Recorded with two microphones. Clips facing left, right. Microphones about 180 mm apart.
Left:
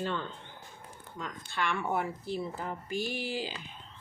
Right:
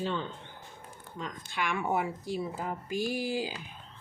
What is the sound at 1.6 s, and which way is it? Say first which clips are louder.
Speech: right 1 dB; 10° right (ahead or behind).